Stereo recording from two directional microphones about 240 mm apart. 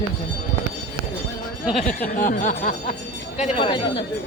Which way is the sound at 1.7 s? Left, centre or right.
Left.